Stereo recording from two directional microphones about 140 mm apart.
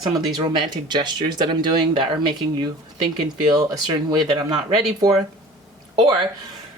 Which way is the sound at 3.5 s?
25° right (ahead or behind).